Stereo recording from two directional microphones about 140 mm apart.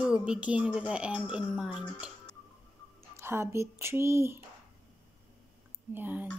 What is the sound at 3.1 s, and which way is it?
Speech, 20° right (ahead or behind).